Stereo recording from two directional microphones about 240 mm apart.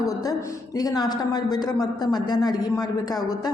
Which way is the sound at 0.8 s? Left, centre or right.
Centre.